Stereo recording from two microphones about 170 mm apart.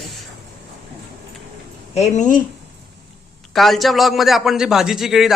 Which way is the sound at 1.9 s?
45° left (ahead or behind).